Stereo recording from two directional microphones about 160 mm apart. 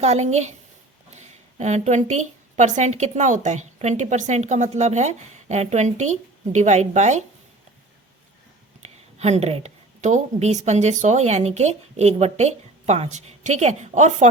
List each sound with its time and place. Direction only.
0.0 s speech: 45° right (ahead or behind)
8.8 s a woman's voice: 45° right (ahead or behind)